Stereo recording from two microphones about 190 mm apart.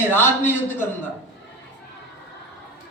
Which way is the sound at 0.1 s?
10° left (ahead or behind).